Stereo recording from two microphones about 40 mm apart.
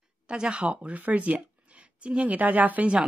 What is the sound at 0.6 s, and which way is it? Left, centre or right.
A woman's voice, right.